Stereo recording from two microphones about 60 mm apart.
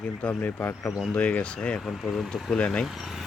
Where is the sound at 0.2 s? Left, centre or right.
Left.